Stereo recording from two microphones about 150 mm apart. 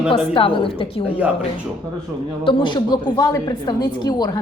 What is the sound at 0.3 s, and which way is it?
Speech, 35° left (ahead or behind).